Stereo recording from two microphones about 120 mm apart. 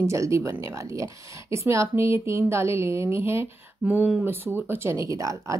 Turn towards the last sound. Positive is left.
turn(degrees=-30)  # may be behind; listen again after turning